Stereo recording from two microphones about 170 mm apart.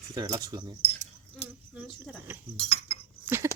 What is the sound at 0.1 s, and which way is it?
Speech, 20° right (ahead or behind).